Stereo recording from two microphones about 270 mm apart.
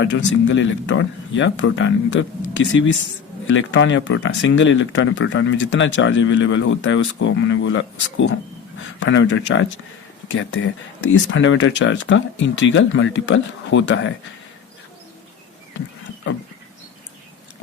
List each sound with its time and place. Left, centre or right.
0.4 s speech: left